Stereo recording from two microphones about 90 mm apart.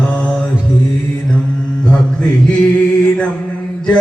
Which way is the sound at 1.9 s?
10° left (ahead or behind).